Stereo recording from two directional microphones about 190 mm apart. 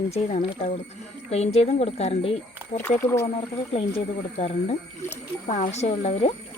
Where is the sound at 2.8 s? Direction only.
10° left (ahead or behind).